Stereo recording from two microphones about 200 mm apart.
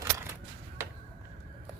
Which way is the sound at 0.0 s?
10° right (ahead or behind).